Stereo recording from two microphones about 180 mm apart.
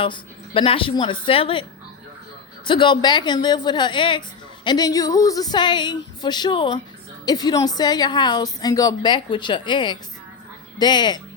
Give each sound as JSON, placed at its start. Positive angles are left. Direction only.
{"t": 0.0, "sound": "a woman's voice", "side_deg": 30}
{"t": 2.6, "sound": "a woman's voice", "side_deg": 25}